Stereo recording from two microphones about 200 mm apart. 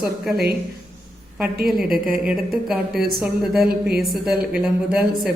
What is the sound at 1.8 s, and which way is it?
Speech, 45° right (ahead or behind).